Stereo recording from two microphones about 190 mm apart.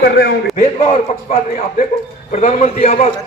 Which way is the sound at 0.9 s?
35° left (ahead or behind).